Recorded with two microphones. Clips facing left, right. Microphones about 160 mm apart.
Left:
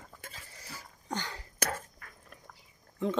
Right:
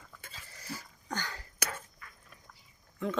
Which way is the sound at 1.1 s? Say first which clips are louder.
Left 1 dB; 20° left (ahead or behind).